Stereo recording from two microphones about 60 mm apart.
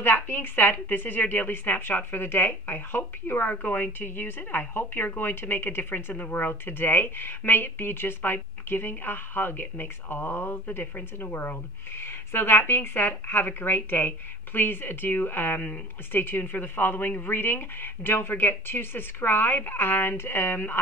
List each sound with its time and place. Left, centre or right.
0.0 s a woman's voice: left